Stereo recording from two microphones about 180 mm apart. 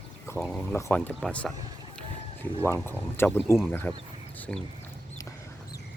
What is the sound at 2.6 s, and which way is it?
Speech, 10° left (ahead or behind).